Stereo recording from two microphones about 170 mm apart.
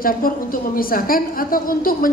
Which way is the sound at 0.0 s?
55° left (ahead or behind).